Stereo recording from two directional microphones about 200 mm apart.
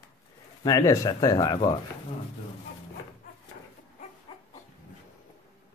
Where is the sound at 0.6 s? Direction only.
15° left (ahead or behind).